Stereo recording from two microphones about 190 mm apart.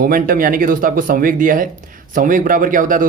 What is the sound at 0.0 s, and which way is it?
Speech, 50° right (ahead or behind).